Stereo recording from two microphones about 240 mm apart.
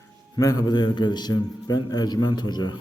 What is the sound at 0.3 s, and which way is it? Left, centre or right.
A man's voice, centre.